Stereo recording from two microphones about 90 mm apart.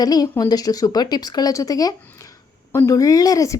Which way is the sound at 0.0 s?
45° left (ahead or behind).